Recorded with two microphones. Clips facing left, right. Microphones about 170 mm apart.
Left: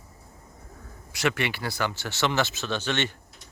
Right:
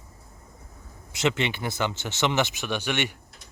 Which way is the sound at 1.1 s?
20° right (ahead or behind).